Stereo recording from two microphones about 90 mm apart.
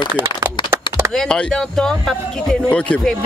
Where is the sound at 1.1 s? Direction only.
10° left (ahead or behind).